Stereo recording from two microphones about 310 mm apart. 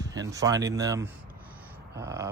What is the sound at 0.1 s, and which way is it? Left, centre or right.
Speech, centre.